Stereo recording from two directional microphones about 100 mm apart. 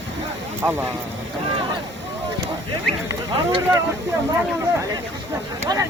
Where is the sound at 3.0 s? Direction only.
55° right (ahead or behind).